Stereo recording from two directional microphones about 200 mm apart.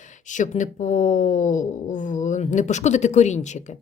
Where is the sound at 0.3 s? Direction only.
40° left (ahead or behind).